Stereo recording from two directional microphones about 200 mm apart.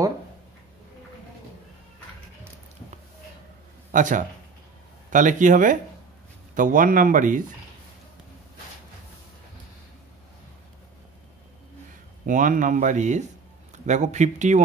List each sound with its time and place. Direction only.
3.9 s a man's voice: 40° right (ahead or behind)
12.3 s speech: 40° right (ahead or behind)